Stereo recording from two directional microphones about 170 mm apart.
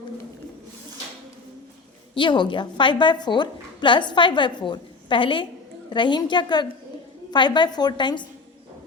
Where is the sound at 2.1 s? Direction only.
30° left (ahead or behind).